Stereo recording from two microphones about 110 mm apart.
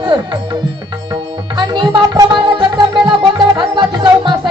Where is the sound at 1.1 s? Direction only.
40° right (ahead or behind).